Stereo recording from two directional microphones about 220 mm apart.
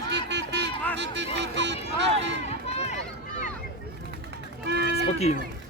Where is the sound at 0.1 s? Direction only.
50° right (ahead or behind).